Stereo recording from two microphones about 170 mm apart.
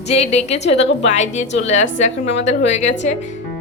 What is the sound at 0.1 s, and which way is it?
A woman's voice, 40° left (ahead or behind).